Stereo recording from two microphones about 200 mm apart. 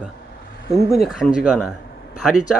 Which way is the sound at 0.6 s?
55° left (ahead or behind).